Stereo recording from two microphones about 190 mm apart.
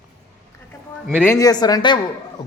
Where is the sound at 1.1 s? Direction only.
15° left (ahead or behind).